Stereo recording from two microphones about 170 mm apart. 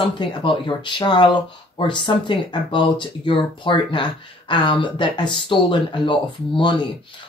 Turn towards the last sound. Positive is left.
turn(degrees=30)  # may be behind; listen again after turning